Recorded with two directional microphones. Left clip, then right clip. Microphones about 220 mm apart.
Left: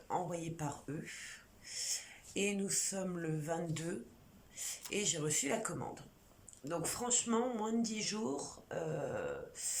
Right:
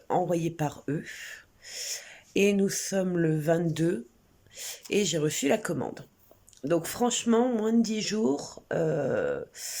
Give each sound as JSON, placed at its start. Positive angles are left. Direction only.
{"t": 0.1, "sound": "speech", "side_deg": -40}